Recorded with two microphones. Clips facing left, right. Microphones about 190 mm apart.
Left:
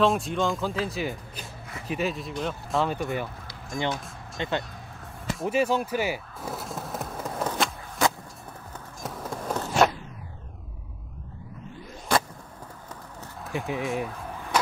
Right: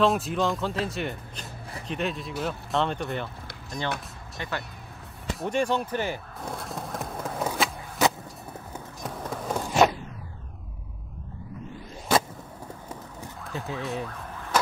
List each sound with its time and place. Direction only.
0.0 s speech: centre (ahead or behind)
4.4 s speech: 20° left (ahead or behind)
5.4 s a sound: 5° left (ahead or behind)
9.0 s walk: centre (ahead or behind)
13.5 s speech: 15° left (ahead or behind)